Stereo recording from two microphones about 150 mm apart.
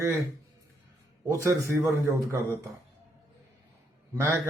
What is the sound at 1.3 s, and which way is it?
Speech, 20° right (ahead or behind).